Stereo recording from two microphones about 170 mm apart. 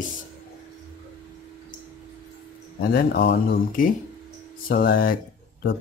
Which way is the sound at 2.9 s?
65° left (ahead or behind).